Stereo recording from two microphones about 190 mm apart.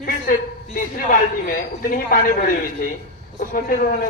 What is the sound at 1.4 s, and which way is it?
A man's voice, 45° left (ahead or behind).